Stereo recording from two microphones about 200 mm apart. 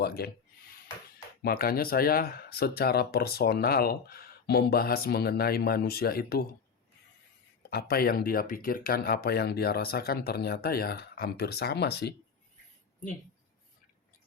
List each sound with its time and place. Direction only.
0.0 s speech: 50° left (ahead or behind)
1.4 s speech: 50° left (ahead or behind)
7.7 s speech: 50° left (ahead or behind)